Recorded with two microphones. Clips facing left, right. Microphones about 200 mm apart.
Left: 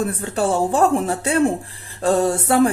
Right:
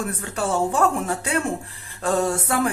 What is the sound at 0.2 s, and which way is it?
Speech, 30° left (ahead or behind).